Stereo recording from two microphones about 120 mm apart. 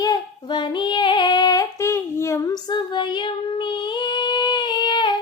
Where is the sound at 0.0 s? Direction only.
40° left (ahead or behind).